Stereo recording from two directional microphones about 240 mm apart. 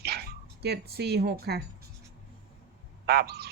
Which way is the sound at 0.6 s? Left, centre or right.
Right.